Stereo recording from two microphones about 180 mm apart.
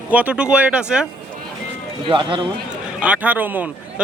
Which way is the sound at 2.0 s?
30° right (ahead or behind).